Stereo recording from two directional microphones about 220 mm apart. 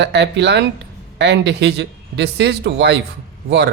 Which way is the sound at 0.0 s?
50° right (ahead or behind).